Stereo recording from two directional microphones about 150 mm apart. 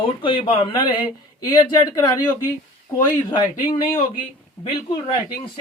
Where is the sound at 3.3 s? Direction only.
30° left (ahead or behind).